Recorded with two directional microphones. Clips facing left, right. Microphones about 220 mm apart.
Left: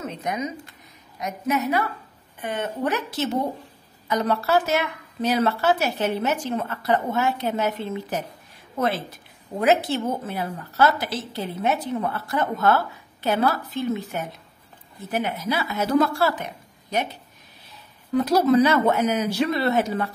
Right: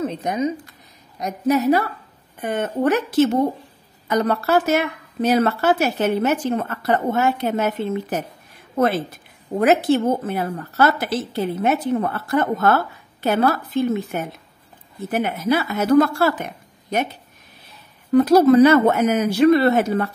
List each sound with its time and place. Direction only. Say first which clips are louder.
0.0 s a woman's voice: right 6 dB; 30° right (ahead or behind)
2.4 s a woman's voice: right 6 dB; 50° right (ahead or behind)
18.1 s a woman's voice: right 6 dB; 50° right (ahead or behind)